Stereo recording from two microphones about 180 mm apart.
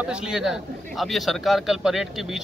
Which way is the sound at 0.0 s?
5° right (ahead or behind).